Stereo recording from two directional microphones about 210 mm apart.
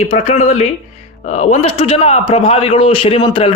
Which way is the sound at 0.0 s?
30° left (ahead or behind).